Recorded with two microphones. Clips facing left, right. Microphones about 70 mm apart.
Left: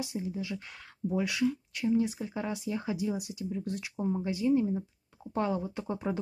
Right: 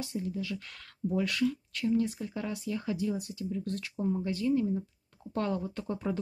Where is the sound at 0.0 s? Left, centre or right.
Centre.